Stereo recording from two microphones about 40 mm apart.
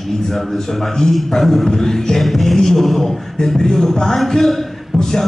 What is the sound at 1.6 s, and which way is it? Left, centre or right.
Beatboxing, centre.